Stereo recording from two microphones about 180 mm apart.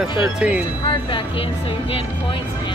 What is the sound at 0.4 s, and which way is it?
Music, 5° right (ahead or behind).